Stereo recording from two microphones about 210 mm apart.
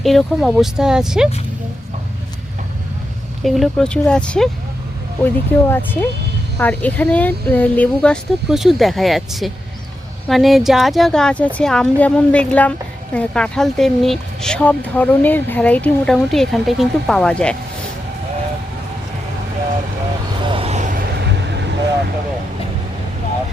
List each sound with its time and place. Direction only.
0.0 s speech: centre (ahead or behind)
3.4 s speech: centre (ahead or behind)
20.4 s vehicle: 25° right (ahead or behind)
21.2 s vehicle: 55° right (ahead or behind)